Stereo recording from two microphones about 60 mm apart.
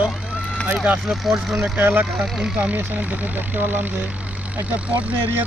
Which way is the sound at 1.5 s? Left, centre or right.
Centre.